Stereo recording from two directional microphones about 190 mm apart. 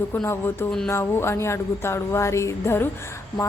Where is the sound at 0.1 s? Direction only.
15° left (ahead or behind).